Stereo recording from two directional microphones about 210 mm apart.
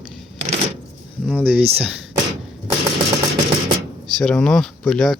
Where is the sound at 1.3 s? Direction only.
5° right (ahead or behind).